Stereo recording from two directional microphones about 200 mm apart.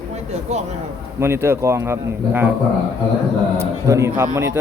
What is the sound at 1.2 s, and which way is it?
Speech, 10° right (ahead or behind).